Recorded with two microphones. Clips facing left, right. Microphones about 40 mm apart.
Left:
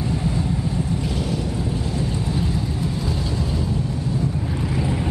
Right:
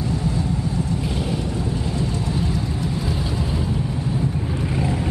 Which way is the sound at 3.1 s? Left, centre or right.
Centre.